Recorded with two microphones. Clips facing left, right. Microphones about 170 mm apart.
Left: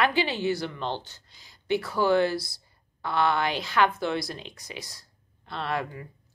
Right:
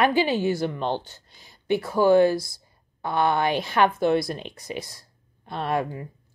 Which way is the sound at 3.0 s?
15° right (ahead or behind).